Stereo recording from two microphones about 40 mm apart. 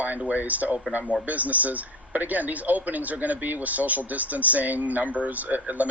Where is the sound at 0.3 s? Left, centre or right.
Right.